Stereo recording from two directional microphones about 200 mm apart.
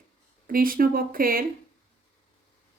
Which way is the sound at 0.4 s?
45° right (ahead or behind).